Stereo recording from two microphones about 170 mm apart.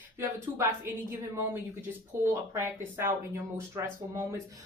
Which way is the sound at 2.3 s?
15° right (ahead or behind).